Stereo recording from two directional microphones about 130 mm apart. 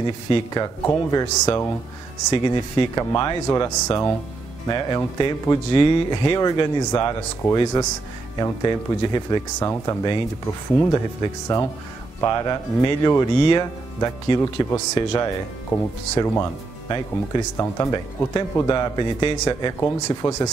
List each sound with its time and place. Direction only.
0.0 s speech: 35° left (ahead or behind)
2.3 s speech: 35° left (ahead or behind)
17.6 s speech: 30° left (ahead or behind)
19.4 s speech: 25° left (ahead or behind)